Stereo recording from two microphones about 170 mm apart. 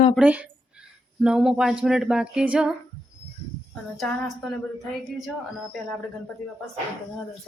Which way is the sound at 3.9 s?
5° left (ahead or behind).